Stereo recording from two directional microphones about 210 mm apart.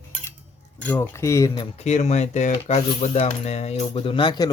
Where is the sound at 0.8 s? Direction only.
10° left (ahead or behind).